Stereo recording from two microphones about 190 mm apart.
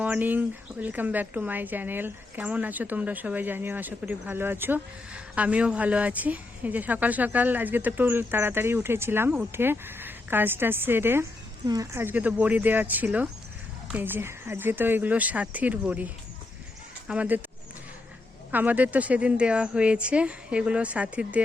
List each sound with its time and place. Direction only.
0.0 s speech: 10° right (ahead or behind)
18.5 s speech: 10° right (ahead or behind)